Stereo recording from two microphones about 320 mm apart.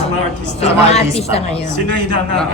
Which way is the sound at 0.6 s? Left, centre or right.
Centre.